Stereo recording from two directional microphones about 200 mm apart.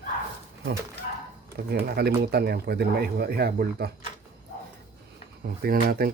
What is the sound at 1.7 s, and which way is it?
Speech, 55° right (ahead or behind).